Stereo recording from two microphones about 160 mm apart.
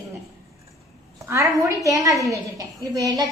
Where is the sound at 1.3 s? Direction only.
20° right (ahead or behind).